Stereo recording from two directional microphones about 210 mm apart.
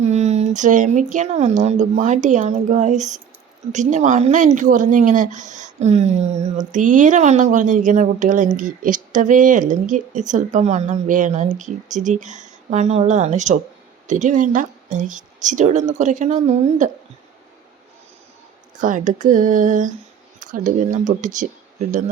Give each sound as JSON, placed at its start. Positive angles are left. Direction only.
{"t": 0.0, "sound": "speech", "side_deg": -30}
{"t": 18.8, "sound": "speech", "side_deg": -35}